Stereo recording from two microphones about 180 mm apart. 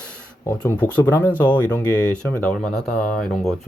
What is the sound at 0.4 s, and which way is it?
Speech, 10° left (ahead or behind).